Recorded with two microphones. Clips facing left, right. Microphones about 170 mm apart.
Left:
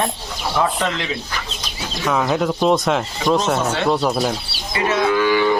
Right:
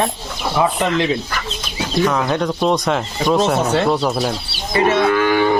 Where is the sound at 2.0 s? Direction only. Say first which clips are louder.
Left 2 dB; centre (ahead or behind).